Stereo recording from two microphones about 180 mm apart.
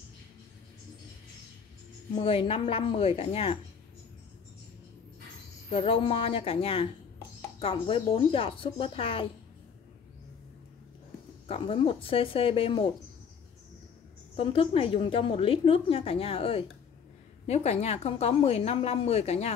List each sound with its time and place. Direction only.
2.1 s a woman's voice: 30° left (ahead or behind)
5.7 s a woman's voice: 30° left (ahead or behind)
11.4 s a woman's voice: 30° left (ahead or behind)
14.3 s a woman's voice: 30° left (ahead or behind)